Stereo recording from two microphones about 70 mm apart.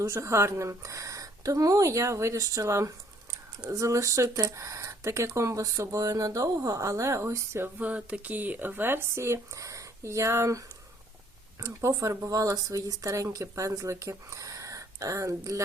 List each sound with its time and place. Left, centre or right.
0.0 s speech: right
7.6 s speech: right
11.6 s speech: right